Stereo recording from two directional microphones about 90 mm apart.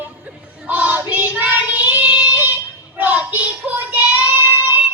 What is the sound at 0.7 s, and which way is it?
Child singing, 15° right (ahead or behind).